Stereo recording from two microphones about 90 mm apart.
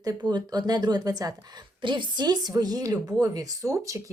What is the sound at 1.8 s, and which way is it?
A woman's voice, 60° right (ahead or behind).